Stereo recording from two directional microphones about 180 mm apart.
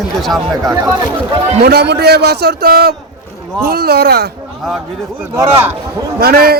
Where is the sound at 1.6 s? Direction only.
65° right (ahead or behind).